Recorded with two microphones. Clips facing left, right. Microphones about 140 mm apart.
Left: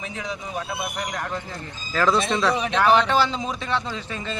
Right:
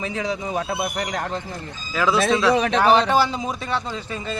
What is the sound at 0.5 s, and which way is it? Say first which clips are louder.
Speech: right 5 dB; 80° right.